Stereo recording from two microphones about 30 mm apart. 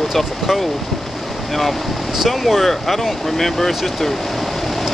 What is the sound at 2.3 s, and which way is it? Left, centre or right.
Speech, centre.